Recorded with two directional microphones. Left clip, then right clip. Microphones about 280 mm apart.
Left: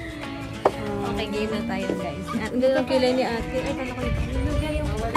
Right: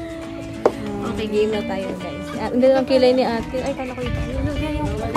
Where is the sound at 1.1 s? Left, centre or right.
Centre.